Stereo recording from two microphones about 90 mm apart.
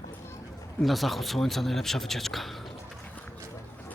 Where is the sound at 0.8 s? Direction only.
Centre (ahead or behind).